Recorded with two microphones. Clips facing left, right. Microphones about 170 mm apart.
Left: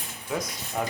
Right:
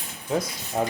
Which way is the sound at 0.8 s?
20° right (ahead or behind).